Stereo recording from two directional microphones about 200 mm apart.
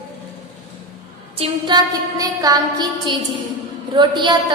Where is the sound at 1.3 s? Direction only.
25° right (ahead or behind).